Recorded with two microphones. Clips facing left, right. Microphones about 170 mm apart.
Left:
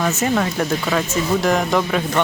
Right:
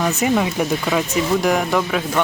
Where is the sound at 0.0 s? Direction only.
10° right (ahead or behind).